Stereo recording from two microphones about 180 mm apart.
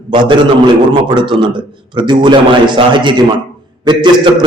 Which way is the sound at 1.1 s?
25° right (ahead or behind).